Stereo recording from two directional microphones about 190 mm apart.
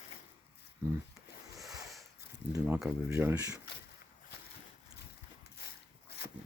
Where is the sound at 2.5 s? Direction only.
10° right (ahead or behind).